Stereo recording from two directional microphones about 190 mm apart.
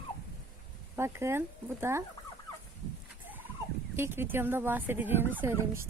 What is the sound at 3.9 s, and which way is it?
Speech, 10° right (ahead or behind).